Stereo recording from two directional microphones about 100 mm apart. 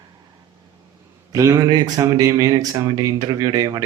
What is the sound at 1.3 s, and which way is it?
Speech, 30° right (ahead or behind).